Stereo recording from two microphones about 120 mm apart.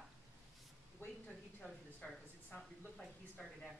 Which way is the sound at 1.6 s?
5° left (ahead or behind).